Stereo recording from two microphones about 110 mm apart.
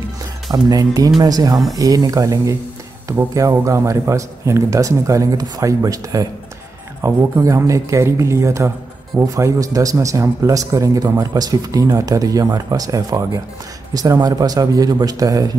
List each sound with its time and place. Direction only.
0.5 s speech: 35° right (ahead or behind)